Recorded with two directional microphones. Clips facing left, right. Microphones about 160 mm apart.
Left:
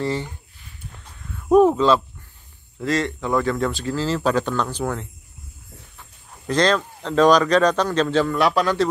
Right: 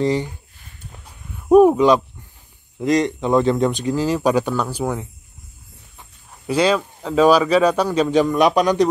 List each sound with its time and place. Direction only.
0.0 s speech: 15° right (ahead or behind)
0.9 s a sound: 10° right (ahead or behind)
2.8 s speech: 20° right (ahead or behind)